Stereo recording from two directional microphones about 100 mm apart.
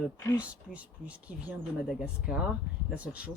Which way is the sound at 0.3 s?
15° right (ahead or behind).